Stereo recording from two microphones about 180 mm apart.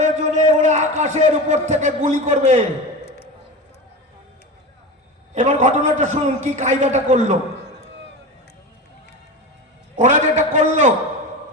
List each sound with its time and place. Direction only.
0.0 s a man's voice: 40° right (ahead or behind)
5.3 s a man's voice: 45° right (ahead or behind)
10.0 s a man's voice: 40° right (ahead or behind)